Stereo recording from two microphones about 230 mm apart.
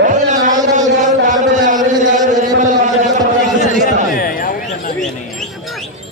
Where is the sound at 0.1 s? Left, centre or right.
Right.